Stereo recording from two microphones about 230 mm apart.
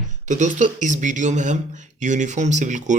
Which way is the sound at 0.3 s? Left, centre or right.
Right.